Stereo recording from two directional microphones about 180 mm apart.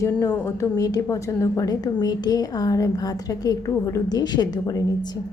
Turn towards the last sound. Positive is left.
turn(degrees=20)  # may be behind; listen again after turning